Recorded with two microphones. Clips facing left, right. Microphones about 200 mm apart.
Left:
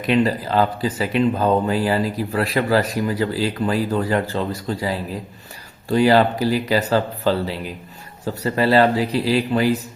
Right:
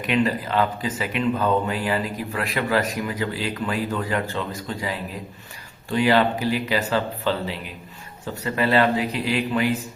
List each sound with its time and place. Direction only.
0.0 s speech: 35° left (ahead or behind)